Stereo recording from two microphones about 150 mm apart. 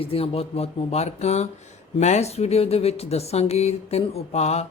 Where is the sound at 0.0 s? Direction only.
40° left (ahead or behind).